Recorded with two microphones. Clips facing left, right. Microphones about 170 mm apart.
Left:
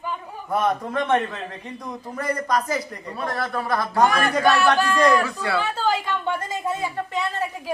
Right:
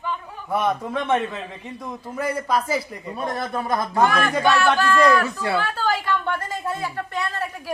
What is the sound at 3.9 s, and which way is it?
A man's voice, centre (ahead or behind).